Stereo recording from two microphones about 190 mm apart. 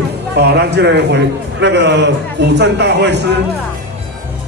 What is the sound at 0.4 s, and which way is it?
A man's voice, 60° right (ahead or behind).